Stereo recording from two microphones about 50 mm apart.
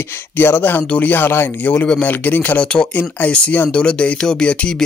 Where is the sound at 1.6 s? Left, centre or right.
Left.